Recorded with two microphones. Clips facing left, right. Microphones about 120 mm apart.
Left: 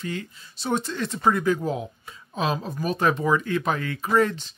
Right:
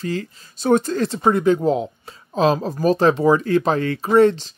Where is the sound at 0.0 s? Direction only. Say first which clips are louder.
Right 6 dB; 35° right (ahead or behind).